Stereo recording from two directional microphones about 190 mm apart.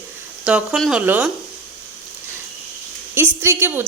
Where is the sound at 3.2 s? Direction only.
10° right (ahead or behind).